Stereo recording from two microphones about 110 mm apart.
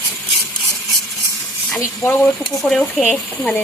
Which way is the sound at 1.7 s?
15° left (ahead or behind).